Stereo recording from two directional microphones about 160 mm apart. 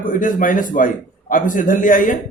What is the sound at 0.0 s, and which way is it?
A man's voice, 55° left (ahead or behind).